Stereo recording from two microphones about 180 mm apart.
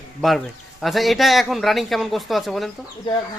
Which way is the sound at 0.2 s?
Centre (ahead or behind).